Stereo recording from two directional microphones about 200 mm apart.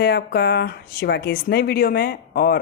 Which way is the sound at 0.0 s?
55° left (ahead or behind).